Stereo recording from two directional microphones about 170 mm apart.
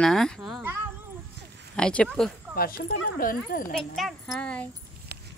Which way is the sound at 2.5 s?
60° left (ahead or behind).